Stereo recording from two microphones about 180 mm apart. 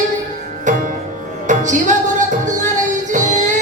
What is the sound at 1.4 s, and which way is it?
Music, 45° right (ahead or behind).